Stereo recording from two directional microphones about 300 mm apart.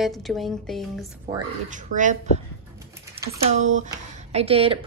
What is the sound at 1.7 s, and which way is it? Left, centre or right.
Speech, right.